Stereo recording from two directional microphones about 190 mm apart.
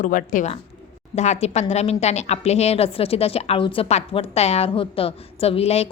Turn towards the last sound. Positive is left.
turn(degrees=30)  # may be behind; listen again after turning